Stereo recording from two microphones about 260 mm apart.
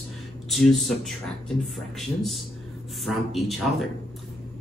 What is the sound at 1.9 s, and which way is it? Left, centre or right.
A man's voice, centre.